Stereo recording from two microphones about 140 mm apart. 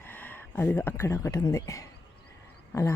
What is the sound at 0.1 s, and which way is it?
Speech, 10° left (ahead or behind).